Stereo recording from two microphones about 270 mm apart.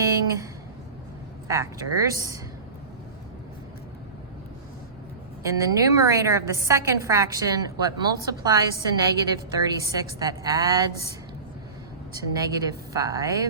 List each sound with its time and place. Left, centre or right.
1.5 s a woman's voice: centre
5.4 s a woman's voice: centre
12.1 s a woman's voice: centre